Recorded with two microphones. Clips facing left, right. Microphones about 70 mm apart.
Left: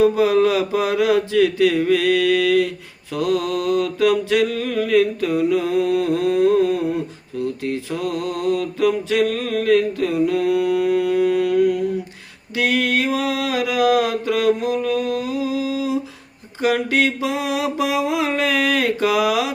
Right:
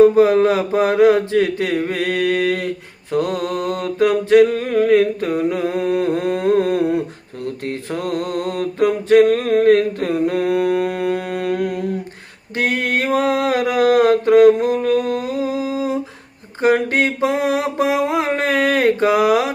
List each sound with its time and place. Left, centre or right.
0.0 s mantra: right
3.1 s a sound: right
12.5 s mantra: right